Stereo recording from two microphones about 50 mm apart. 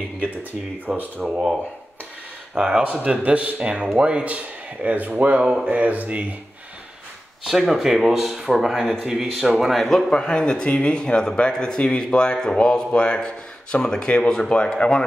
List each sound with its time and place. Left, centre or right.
0.2 s speech: right
1.2 s speech: centre
2.8 s speech: right
3.6 s speech: centre
7.4 s speech: centre